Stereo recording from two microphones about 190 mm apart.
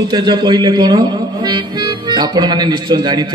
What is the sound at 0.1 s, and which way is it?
A man's voice, 25° right (ahead or behind).